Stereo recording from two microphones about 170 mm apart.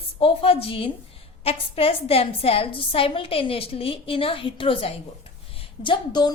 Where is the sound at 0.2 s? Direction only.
35° left (ahead or behind).